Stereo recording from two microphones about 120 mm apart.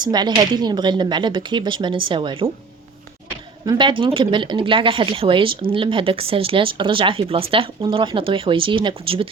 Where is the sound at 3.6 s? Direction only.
40° right (ahead or behind).